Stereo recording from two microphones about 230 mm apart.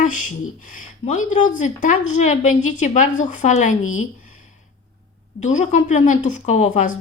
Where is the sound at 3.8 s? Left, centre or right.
Left.